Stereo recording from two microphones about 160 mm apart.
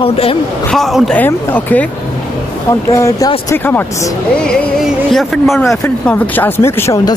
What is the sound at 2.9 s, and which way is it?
Speech, 20° left (ahead or behind).